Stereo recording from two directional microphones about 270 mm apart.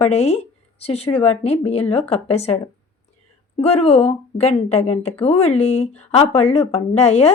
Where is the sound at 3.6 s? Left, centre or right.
Left.